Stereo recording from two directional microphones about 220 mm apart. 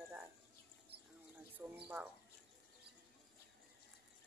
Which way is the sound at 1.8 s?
10° right (ahead or behind).